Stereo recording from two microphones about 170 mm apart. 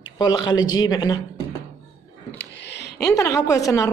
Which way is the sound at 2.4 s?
90° left.